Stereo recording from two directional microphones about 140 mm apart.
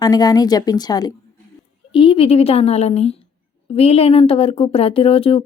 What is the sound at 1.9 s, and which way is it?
Speech, 40° left (ahead or behind).